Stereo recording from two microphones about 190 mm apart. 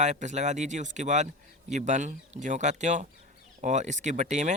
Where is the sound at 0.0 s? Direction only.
40° right (ahead or behind).